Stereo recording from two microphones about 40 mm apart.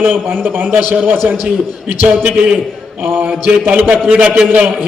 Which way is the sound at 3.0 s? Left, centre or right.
Right.